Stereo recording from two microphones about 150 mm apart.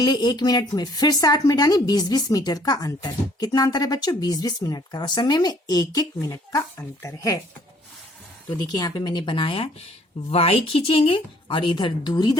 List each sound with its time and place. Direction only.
0.0 s speech: 30° left (ahead or behind)
8.4 s speech: 25° left (ahead or behind)